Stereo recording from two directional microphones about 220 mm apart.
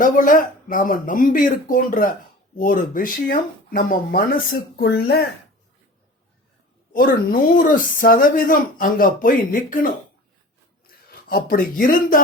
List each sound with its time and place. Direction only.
0.0 s speech: 35° left (ahead or behind)
6.9 s speech: 40° left (ahead or behind)
11.1 s speech: 40° left (ahead or behind)